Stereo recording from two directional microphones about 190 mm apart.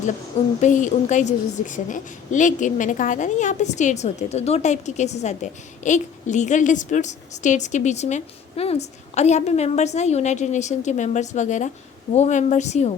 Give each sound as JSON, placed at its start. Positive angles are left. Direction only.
{"t": 0.6, "sound": "a woman's voice", "side_deg": 40}